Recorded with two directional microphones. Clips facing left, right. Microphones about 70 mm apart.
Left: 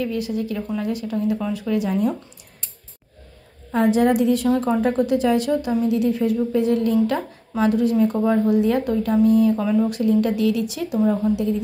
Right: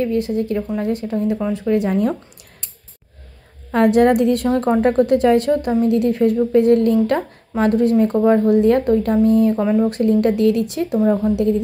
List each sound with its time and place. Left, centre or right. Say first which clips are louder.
0.0 s speech: right 5 dB; right
3.7 s a woman's voice: right 4 dB; right
9.9 s a woman's voice: right 3 dB; right